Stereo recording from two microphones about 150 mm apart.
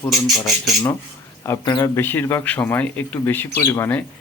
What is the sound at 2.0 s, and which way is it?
Speech, 15° left (ahead or behind).